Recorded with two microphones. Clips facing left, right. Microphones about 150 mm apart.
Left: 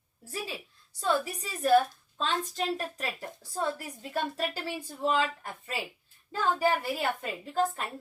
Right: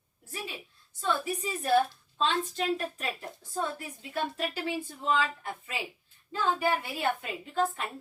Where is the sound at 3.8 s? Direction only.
40° left (ahead or behind).